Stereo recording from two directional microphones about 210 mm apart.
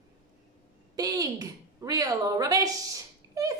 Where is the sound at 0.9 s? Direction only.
15° right (ahead or behind).